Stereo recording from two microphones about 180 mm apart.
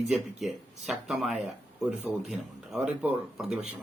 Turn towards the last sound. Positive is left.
turn(degrees=-5)  # may be behind; listen again after turning